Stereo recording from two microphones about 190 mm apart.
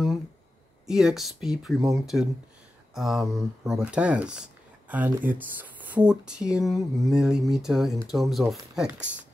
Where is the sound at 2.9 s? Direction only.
Centre (ahead or behind).